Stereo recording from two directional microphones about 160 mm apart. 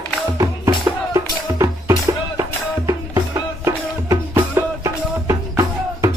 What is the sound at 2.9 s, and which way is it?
Music, 20° right (ahead or behind).